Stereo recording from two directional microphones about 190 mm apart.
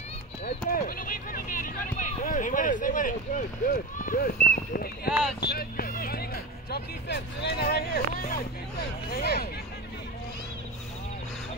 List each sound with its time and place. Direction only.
0.7 s speech: 50° left (ahead or behind)